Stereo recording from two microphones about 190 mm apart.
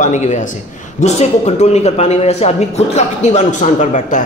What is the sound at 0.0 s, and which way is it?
A man's voice, 40° left (ahead or behind).